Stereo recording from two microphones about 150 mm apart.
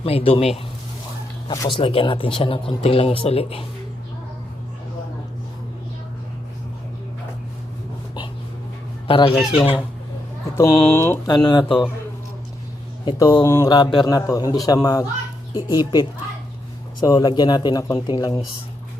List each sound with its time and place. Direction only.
0.0 s speech: 40° left (ahead or behind)
1.5 s speech: 30° left (ahead or behind)
9.0 s speech: 35° left (ahead or behind)
10.5 s speech: 15° left (ahead or behind)
11.3 s speech: 30° left (ahead or behind)
13.1 s speech: 25° left (ahead or behind)
17.0 s speech: 30° left (ahead or behind)